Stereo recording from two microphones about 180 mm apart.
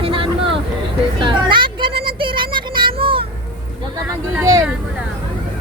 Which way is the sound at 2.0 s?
30° right (ahead or behind).